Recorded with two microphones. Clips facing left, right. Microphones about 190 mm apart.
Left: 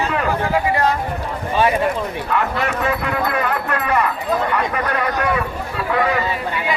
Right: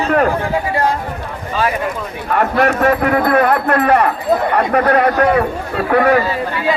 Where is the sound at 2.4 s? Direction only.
60° right (ahead or behind).